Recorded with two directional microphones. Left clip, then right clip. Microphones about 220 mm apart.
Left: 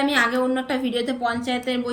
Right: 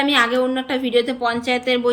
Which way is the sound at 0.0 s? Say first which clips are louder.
Right 3 dB; centre (ahead or behind).